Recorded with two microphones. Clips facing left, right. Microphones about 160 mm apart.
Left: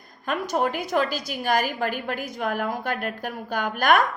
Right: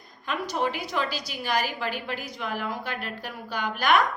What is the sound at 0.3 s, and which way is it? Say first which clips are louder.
A woman's voice: left 3 dB; 50° left (ahead or behind).